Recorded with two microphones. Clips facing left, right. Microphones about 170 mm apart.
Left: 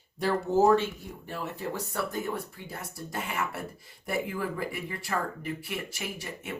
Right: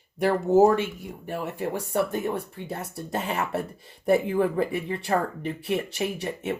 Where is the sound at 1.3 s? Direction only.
50° right (ahead or behind).